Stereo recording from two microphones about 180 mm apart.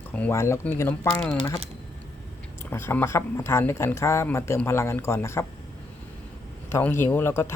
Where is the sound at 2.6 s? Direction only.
15° left (ahead or behind).